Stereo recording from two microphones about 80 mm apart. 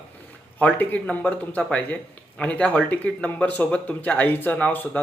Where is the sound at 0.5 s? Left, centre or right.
Left.